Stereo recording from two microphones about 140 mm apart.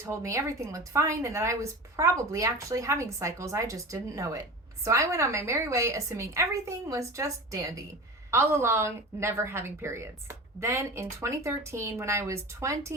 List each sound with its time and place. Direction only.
0.0 s a woman's voice: 20° right (ahead or behind)